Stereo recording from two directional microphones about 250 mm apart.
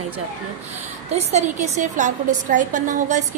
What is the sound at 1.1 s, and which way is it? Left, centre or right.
A woman's voice, right.